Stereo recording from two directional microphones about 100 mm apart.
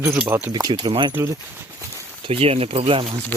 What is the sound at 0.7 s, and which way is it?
Speech, 55° right (ahead or behind).